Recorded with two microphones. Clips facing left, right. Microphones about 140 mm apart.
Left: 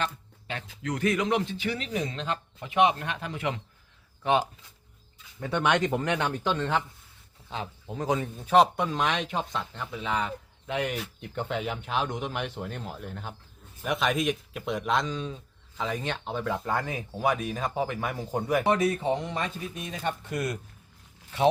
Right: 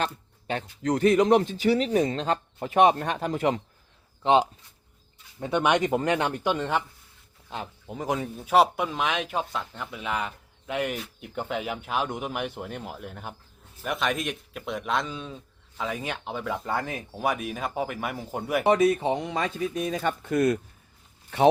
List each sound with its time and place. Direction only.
0.0 s speech: 40° right (ahead or behind)
4.2 s speech: 25° right (ahead or behind); by 18.6 s 5° right (ahead or behind)
19.7 s speech: 90° right
20.2 s speech: 50° right (ahead or behind)